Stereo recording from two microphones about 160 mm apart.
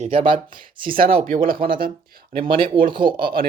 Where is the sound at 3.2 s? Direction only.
65° right (ahead or behind).